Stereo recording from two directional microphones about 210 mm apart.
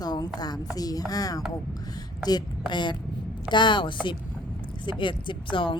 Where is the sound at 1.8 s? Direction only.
20° left (ahead or behind).